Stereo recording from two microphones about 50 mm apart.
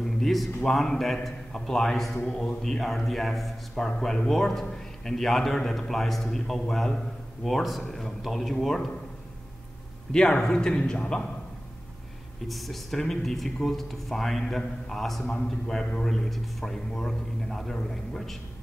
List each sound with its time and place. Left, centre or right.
0.0 s a sound: centre
0.6 s a man's voice: centre
10.1 s a man's voice: centre
12.4 s a man's voice: centre
15.2 s a man's voice: centre